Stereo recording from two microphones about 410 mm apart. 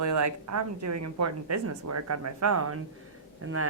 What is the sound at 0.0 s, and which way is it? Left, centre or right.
A woman's voice, right.